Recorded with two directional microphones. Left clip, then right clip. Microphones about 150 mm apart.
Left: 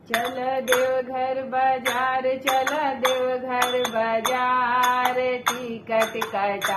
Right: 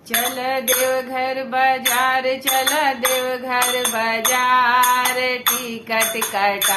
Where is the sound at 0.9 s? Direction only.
25° right (ahead or behind).